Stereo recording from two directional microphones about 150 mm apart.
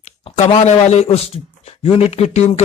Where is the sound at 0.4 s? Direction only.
50° left (ahead or behind).